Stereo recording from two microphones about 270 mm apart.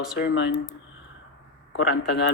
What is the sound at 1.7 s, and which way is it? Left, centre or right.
Speech, left.